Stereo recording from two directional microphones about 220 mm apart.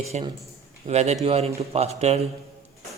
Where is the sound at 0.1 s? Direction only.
30° right (ahead or behind).